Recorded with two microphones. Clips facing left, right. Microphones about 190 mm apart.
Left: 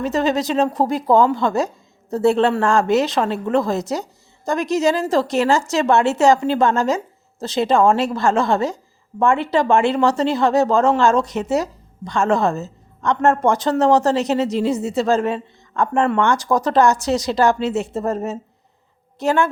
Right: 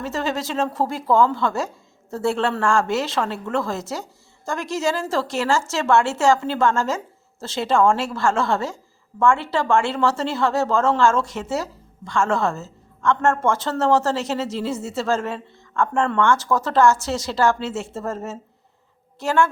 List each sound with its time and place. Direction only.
0.0 s a woman's voice: 20° left (ahead or behind)